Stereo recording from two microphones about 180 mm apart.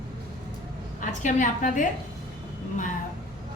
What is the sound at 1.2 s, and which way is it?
Speech, 45° left (ahead or behind).